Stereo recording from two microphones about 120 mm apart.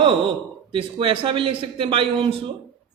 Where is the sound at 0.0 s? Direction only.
45° right (ahead or behind).